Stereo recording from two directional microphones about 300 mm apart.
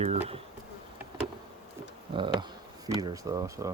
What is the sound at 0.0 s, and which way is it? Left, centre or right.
Bee, centre.